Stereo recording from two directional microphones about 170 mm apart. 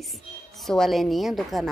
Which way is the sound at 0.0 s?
Centre (ahead or behind).